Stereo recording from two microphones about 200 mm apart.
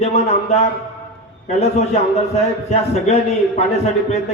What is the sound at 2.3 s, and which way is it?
A man's voice, 35° left (ahead or behind).